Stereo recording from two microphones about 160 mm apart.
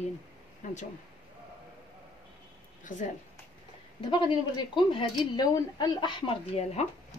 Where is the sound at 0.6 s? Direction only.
50° left (ahead or behind).